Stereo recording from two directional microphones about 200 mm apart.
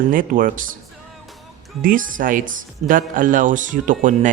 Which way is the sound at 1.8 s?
45° right (ahead or behind).